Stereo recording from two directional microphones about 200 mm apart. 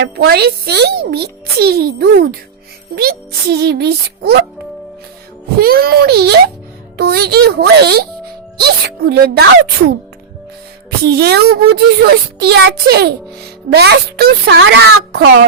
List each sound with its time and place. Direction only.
0.0 s a child's voice: 55° right (ahead or behind)
5.5 s a child's voice: 50° right (ahead or behind)
11.0 s speech: 55° right (ahead or behind)